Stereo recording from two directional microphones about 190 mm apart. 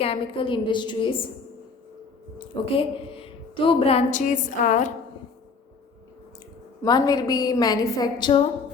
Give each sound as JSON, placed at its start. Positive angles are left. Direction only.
{"t": 0.0, "sound": "a woman's voice", "side_deg": 30}
{"t": 2.7, "sound": "a woman's voice", "side_deg": 30}
{"t": 6.8, "sound": "a woman's voice", "side_deg": 20}